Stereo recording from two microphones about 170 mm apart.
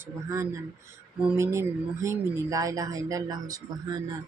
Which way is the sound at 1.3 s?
15° right (ahead or behind).